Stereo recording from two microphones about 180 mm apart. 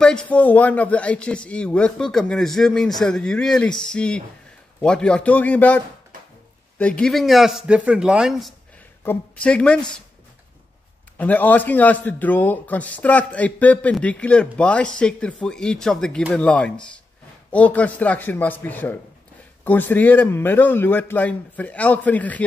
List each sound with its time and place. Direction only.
0.0 s a man's voice: 5° left (ahead or behind)
9.0 s a man's voice: 10° left (ahead or behind)
11.1 s a man's voice: 10° left (ahead or behind)